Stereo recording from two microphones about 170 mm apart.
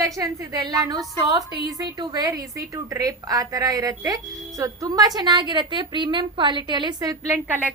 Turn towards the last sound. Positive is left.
turn(degrees=-10)  # may be behind; listen again after turning